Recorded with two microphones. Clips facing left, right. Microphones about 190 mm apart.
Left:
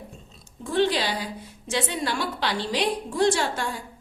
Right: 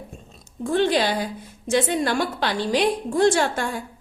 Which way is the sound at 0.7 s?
50° right (ahead or behind).